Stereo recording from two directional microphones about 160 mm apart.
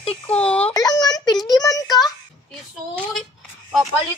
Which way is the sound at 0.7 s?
25° left (ahead or behind).